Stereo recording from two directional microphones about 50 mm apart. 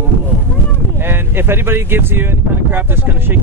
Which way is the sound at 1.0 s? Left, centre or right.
Right.